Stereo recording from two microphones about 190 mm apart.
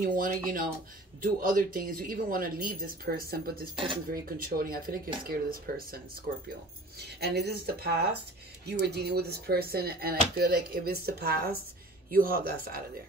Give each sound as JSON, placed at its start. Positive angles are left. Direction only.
{"t": 0.0, "sound": "speech", "side_deg": -45}